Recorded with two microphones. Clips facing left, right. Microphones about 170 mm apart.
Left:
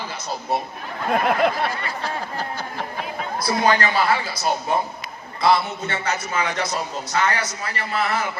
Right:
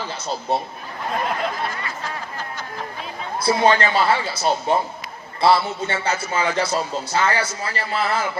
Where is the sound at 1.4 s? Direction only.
65° left (ahead or behind).